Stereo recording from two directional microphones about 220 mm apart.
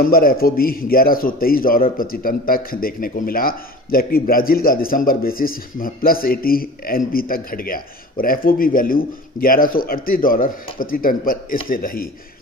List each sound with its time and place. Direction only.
0.0 s speech: 40° left (ahead or behind)